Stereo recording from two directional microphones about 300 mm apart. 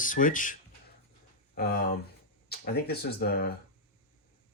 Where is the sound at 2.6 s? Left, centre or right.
Left.